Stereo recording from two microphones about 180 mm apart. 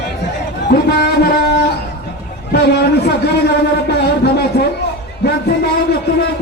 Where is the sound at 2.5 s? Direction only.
65° left (ahead or behind).